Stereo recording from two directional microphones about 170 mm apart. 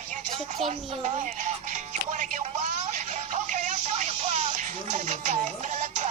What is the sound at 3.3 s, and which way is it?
Music, 45° right (ahead or behind).